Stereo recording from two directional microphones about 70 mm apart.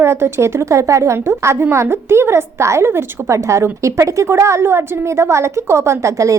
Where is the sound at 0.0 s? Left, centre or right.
Right.